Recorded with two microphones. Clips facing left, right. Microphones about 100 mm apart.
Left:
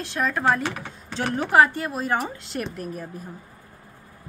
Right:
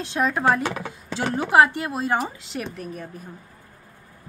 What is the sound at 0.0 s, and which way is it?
A woman's voice, 20° right (ahead or behind).